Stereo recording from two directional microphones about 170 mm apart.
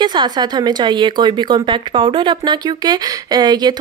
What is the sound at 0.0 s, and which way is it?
Speech, 25° right (ahead or behind).